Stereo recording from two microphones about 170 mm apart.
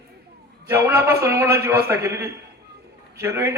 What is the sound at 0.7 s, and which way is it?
A man's voice, 15° right (ahead or behind).